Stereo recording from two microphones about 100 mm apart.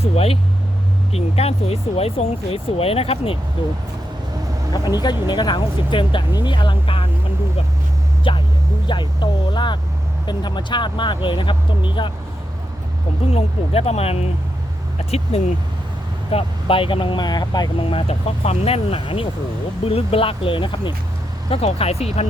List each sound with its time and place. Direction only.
0.0 s speech: 85° left
3.6 s speech: 55° left (ahead or behind)
4.7 s speech: 45° left (ahead or behind); by 7.1 s 65° left (ahead or behind)
8.3 s speech: 55° left (ahead or behind)
13.3 s speech: 90° left
14.9 s a sound: 90° left
16.3 s speech: 65° left (ahead or behind); by 17.7 s 45° left (ahead or behind)
17.7 s speech: 65° left (ahead or behind)
19.8 s speech: 75° left (ahead or behind); by 20.9 s 55° left (ahead or behind)
21.5 s speech: 80° left